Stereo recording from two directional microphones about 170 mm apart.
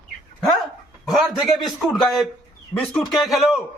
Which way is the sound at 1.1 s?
Centre (ahead or behind).